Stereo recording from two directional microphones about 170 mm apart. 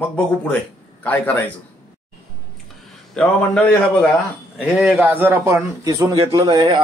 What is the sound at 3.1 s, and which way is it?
A man's voice, 10° left (ahead or behind).